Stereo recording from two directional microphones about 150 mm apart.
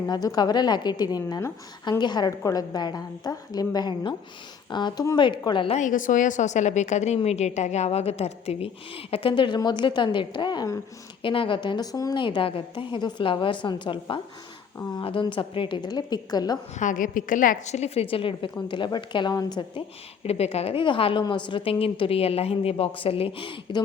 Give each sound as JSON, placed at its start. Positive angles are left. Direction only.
{"t": 0.1, "sound": "a woman's voice", "side_deg": 25}
{"t": 5.7, "sound": "a woman's voice", "side_deg": 60}
{"t": 16.7, "sound": "a woman's voice", "side_deg": 60}
{"t": 20.2, "sound": "a woman's voice", "side_deg": 45}